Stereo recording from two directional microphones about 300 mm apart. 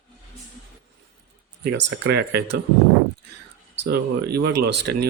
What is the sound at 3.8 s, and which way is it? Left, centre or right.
Speech, right.